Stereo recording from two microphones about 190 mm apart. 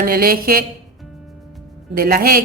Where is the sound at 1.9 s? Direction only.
50° right (ahead or behind).